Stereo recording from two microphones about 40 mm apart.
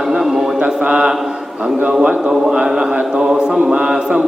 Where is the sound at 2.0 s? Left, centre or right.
Right.